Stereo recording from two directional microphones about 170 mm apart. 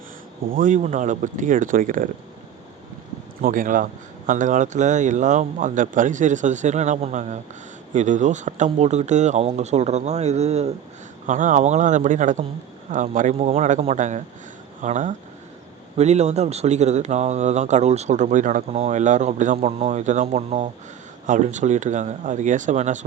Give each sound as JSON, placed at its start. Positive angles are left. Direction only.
{"t": 0.4, "sound": "speech", "side_deg": -55}
{"t": 3.4, "sound": "speech", "side_deg": -50}
{"t": 11.3, "sound": "speech", "side_deg": -50}